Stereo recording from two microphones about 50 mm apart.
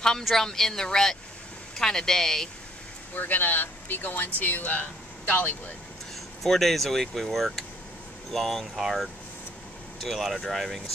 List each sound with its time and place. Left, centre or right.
0.2 s speech: centre
3.2 s speech: left
6.4 s speech: centre